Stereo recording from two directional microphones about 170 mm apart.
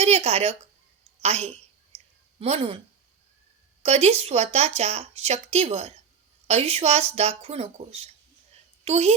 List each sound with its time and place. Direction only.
0.0 s speech: 40° right (ahead or behind)
3.8 s a woman's voice: 40° right (ahead or behind)